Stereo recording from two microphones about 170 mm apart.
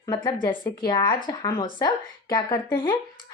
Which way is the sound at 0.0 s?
25° left (ahead or behind).